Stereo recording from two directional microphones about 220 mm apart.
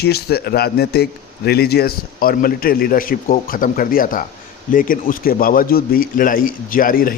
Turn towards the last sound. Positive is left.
turn(degrees=40)  # may be behind; listen again after turning